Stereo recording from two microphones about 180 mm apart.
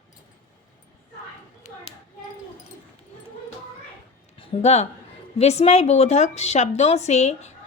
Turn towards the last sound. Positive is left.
turn(degrees=40)  # may be behind; listen again after turning